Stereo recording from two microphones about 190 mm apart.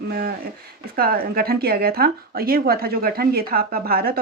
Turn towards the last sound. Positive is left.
turn(degrees=-50)  # may be behind; listen again after turning